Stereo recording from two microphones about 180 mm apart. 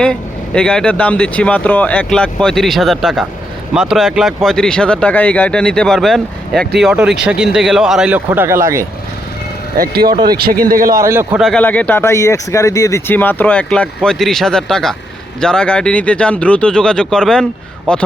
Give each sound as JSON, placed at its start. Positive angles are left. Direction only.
{"t": 0.0, "sound": "a man's voice", "side_deg": 5}
{"t": 9.7, "sound": "speech", "side_deg": -55}
{"t": 11.0, "sound": "a man's voice", "side_deg": -15}
{"t": 11.3, "sound": "speech", "side_deg": 5}